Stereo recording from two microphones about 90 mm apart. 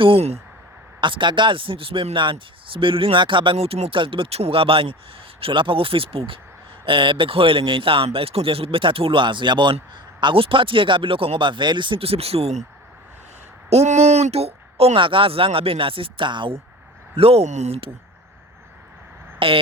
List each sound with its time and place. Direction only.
1.0 s a man's voice: 65° right (ahead or behind); by 4.9 s 90° right
5.4 s a man's voice: 75° right (ahead or behind)
6.8 s a man's voice: 75° right (ahead or behind)
10.2 s a man's voice: 75° right (ahead or behind); by 12.5 s 90° right
14.3 s a man's voice: 80° right; by 16.6 s 65° right (ahead or behind)
17.2 s speech: 90° right
19.4 s a man's voice: 80° right